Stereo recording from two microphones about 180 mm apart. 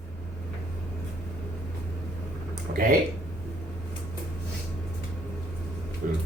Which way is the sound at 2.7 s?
70° right (ahead or behind).